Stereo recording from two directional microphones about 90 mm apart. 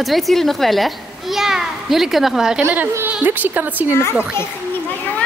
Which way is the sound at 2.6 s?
20° right (ahead or behind).